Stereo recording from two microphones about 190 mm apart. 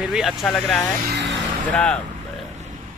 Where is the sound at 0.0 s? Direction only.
Centre (ahead or behind).